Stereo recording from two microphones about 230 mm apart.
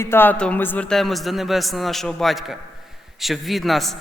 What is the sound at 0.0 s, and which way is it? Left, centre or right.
A man's voice, centre.